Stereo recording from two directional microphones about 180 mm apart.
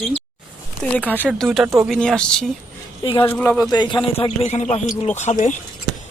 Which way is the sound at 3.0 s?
25° left (ahead or behind).